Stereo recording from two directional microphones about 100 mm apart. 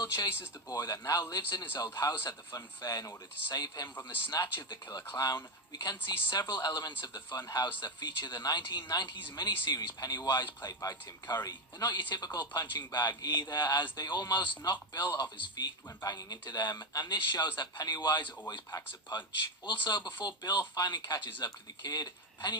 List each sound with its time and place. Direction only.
0.7 s speech: 40° left (ahead or behind)